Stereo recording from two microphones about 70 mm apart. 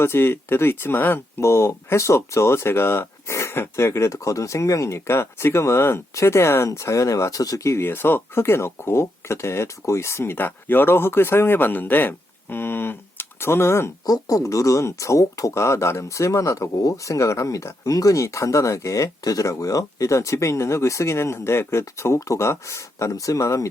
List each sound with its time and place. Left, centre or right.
0.0 s speech: left
1.4 s speech: left
7.9 s speech: left
14.0 s speech: left